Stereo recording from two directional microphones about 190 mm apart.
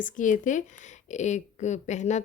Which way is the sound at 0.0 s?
40° left (ahead or behind).